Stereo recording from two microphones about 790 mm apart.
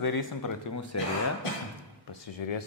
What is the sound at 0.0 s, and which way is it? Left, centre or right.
Speech, left.